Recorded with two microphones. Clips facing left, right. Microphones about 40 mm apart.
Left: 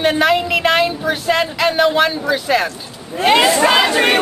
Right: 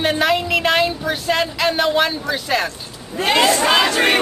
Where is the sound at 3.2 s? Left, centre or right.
Centre.